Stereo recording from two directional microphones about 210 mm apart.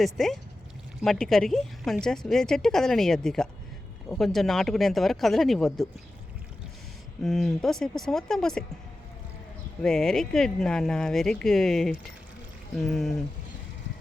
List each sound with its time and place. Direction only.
0.0 s speech: centre (ahead or behind)
7.2 s speech: centre (ahead or behind)
9.8 s speech: 5° left (ahead or behind)